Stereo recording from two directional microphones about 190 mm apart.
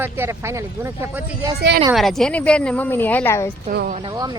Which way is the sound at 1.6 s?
55° right (ahead or behind).